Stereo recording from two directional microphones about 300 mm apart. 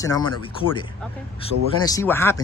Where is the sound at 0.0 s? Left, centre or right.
Centre.